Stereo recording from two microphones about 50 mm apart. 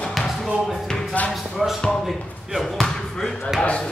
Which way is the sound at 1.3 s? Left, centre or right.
Centre.